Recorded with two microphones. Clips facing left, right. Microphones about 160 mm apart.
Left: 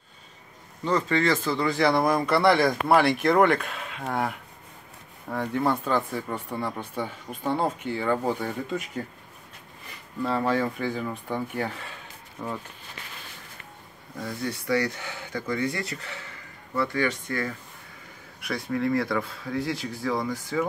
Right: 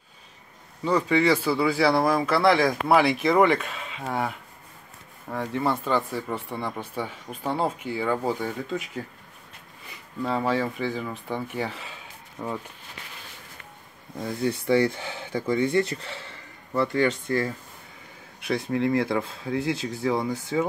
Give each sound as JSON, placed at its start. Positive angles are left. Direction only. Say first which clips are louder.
{"t": 0.8, "sound": "speech", "louder": "right 2 dB", "side_deg": -10}
{"t": 10.2, "sound": "speech", "louder": "even", "side_deg": -5}
{"t": 14.1, "sound": "speech", "louder": "right 5 dB", "side_deg": -25}